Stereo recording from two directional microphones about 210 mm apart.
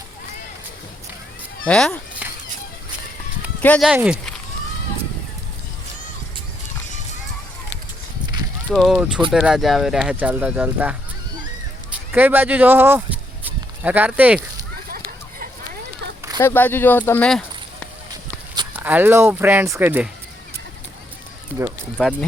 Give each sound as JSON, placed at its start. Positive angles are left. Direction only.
{"t": 1.6, "sound": "speech", "side_deg": 5}
{"t": 3.6, "sound": "speech", "side_deg": 5}
{"t": 3.8, "sound": "speech", "side_deg": -5}
{"t": 8.7, "sound": "speech", "side_deg": 0}
{"t": 12.1, "sound": "speech", "side_deg": -10}
{"t": 13.4, "sound": "sheep", "side_deg": -10}
{"t": 14.8, "sound": "a sound", "side_deg": -45}
{"t": 16.4, "sound": "speech", "side_deg": 10}
{"t": 18.7, "sound": "speech", "side_deg": -10}
{"t": 22.0, "sound": "speech", "side_deg": 0}